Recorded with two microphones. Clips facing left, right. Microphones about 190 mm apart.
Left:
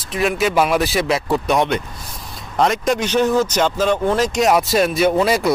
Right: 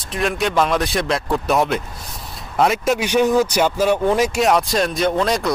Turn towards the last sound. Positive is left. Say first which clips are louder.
# left 3 dB
turn(degrees=5)  # may be behind; listen again after turning